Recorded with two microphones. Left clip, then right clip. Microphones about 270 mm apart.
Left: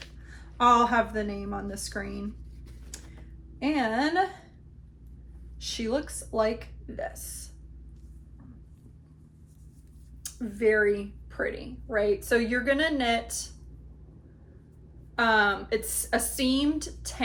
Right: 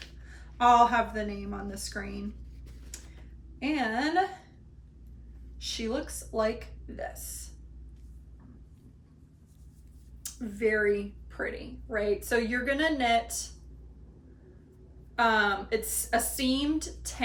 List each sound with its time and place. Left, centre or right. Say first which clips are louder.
0.5 s a woman's voice: even; centre
3.6 s a woman's voice: left 3 dB; centre
5.5 s speech: left 3 dB; centre
10.2 s a woman's voice: left 4 dB; centre
15.1 s a woman's voice: left 2 dB; centre